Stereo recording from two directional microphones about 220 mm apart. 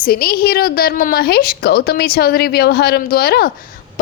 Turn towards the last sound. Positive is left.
turn(degrees=45)  # may be behind; listen again after turning